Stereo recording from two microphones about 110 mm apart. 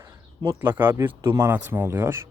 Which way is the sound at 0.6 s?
15° right (ahead or behind).